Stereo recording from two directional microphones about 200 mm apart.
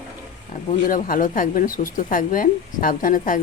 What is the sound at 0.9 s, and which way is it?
A woman's voice, 40° left (ahead or behind).